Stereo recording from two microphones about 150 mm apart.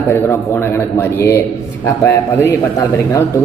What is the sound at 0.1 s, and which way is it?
A man's voice, 15° left (ahead or behind).